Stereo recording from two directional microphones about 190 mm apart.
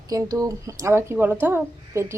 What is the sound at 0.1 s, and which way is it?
Speech, 20° right (ahead or behind).